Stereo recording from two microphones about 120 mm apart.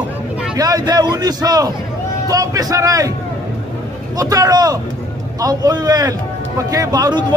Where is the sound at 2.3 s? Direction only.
30° right (ahead or behind).